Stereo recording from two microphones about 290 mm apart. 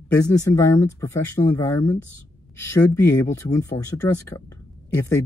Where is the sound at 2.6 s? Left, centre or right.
Centre.